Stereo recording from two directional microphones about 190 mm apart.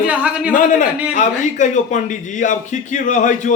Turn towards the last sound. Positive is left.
turn(degrees=40)  # may be behind; listen again after turning